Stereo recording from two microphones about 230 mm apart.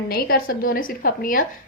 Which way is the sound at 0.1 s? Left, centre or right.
Left.